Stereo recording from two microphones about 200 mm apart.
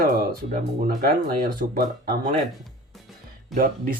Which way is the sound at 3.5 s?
45° right (ahead or behind).